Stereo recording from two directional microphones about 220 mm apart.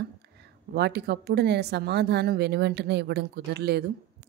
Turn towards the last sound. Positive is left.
turn(degrees=-50)  # may be behind; listen again after turning